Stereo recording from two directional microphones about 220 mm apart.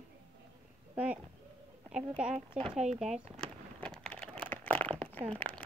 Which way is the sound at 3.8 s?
5° left (ahead or behind).